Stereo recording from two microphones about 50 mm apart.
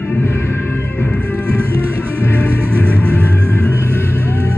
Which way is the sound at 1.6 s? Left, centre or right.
Right.